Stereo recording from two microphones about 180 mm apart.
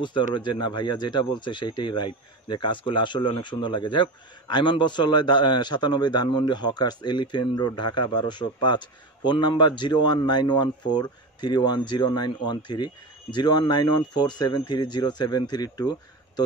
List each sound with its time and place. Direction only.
0.3 s speech: 25° left (ahead or behind)